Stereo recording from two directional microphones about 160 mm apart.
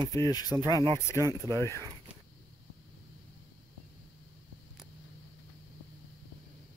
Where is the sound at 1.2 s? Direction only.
20° right (ahead or behind).